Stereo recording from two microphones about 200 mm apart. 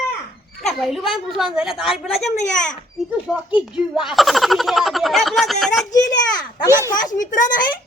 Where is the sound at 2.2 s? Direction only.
35° left (ahead or behind).